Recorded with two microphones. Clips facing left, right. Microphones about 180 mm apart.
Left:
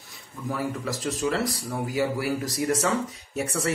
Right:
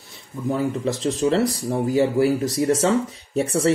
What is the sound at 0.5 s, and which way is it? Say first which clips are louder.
Speech: right 7 dB; 25° right (ahead or behind).